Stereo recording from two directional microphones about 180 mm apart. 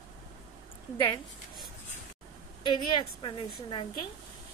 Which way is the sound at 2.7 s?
25° left (ahead or behind).